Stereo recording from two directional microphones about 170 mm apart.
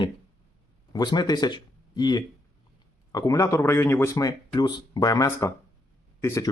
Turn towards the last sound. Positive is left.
turn(degrees=15)  # may be behind; listen again after turning